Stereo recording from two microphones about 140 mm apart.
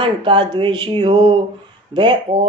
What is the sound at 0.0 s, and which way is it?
Speech, 35° right (ahead or behind).